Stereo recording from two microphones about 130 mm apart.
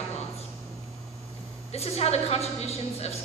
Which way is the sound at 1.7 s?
55° left (ahead or behind).